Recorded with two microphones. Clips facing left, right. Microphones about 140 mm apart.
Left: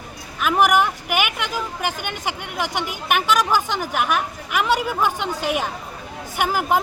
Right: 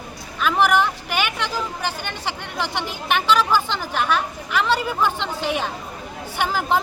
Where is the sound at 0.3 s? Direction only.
10° left (ahead or behind).